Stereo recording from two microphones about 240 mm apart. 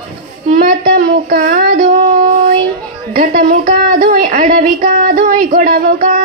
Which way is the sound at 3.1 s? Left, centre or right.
Right.